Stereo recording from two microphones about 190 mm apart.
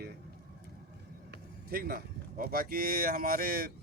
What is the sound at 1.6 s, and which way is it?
Speech, 55° right (ahead or behind).